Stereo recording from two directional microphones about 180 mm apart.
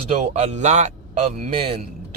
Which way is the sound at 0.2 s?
40° right (ahead or behind).